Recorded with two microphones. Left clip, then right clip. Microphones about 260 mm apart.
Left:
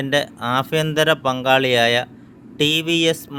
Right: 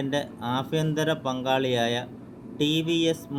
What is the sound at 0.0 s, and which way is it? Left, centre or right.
Speech, left.